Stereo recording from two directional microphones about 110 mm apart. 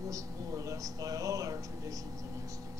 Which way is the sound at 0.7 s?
30° right (ahead or behind).